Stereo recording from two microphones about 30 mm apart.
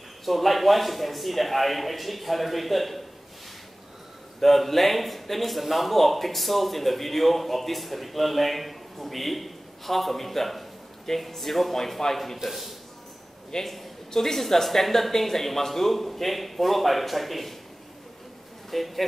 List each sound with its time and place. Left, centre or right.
0.2 s speech: centre
4.4 s speech: centre
12.4 s speech: centre
13.5 s speech: centre
18.7 s speech: centre